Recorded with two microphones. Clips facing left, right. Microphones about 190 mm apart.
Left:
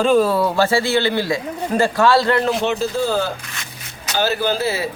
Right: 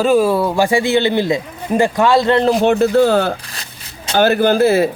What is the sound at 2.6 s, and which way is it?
Speech, 55° right (ahead or behind).